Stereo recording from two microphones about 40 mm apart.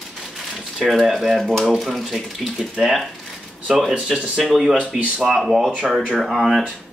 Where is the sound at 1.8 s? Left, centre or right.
Centre.